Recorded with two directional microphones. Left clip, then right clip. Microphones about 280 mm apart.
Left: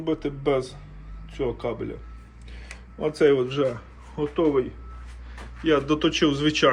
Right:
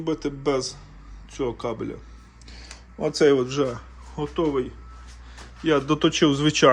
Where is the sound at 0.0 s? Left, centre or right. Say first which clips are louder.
Even; centre.